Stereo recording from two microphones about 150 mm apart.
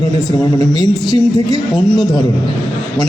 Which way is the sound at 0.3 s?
25° left (ahead or behind).